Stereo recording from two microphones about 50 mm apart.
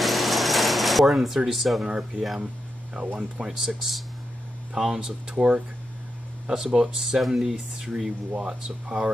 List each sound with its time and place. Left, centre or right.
0.0 s a sound: centre
1.9 s speech: centre
2.9 s speech: centre
5.3 s speech: centre